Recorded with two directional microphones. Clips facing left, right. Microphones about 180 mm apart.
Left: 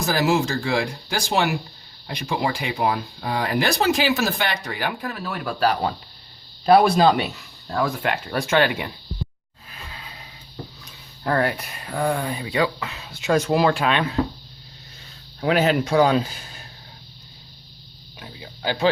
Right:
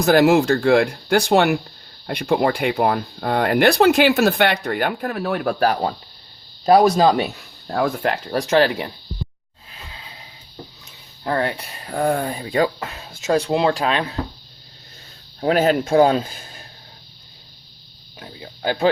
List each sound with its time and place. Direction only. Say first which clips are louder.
0.0 s speech: right 7 dB; 60° right (ahead or behind); by 7.3 s 40° right (ahead or behind)
7.7 s speech: right 3 dB; 55° right (ahead or behind)
8.0 s speech: right 3 dB; 35° right (ahead or behind)
9.7 s music: left 1 dB; 25° right (ahead or behind)
11.2 s speech: even; 25° right (ahead or behind)
15.4 s speech: right 2 dB; 45° right (ahead or behind)
18.6 s speech: right 3 dB; 45° right (ahead or behind)